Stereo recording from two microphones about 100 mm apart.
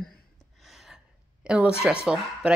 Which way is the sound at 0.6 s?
5° right (ahead or behind).